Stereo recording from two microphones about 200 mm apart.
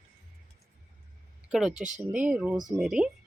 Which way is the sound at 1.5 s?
Centre (ahead or behind).